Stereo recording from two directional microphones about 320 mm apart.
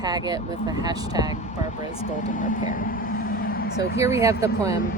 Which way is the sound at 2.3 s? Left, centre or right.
Left.